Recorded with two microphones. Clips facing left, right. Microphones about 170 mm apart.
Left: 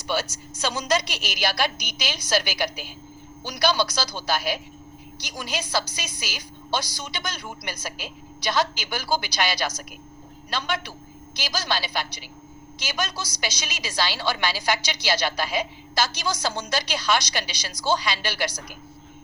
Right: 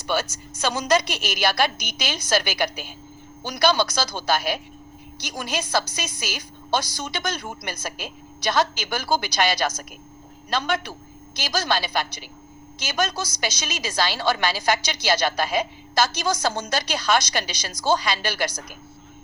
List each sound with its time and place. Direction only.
0.1 s a woman's voice: 55° right (ahead or behind)